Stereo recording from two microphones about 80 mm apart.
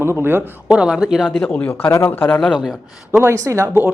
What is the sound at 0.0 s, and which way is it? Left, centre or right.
Speech, right.